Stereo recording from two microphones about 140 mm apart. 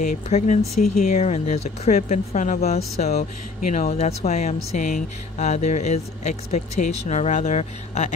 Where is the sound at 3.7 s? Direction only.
60° left (ahead or behind).